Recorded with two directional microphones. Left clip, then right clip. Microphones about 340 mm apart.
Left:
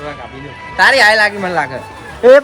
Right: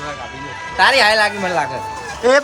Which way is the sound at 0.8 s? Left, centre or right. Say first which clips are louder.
Left 4 dB; centre.